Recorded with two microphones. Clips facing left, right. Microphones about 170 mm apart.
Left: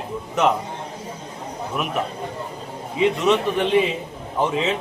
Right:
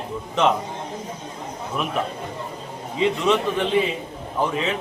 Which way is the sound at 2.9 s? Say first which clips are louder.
Left 2 dB; 15° left (ahead or behind).